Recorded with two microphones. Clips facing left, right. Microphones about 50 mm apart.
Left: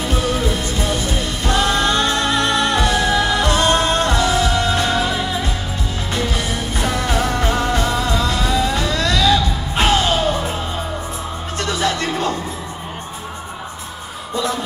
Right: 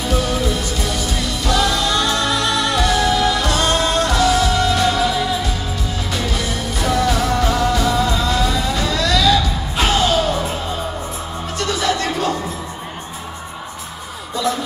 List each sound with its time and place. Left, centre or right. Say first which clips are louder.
0.0 s music: even; left
11.5 s music: right 1 dB; left